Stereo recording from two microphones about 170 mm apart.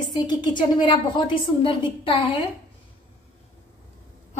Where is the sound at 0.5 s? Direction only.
25° left (ahead or behind).